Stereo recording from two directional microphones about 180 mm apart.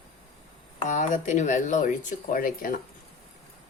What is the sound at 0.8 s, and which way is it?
Speech, 45° left (ahead or behind).